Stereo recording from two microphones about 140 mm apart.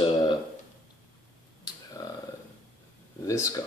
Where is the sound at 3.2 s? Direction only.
25° left (ahead or behind).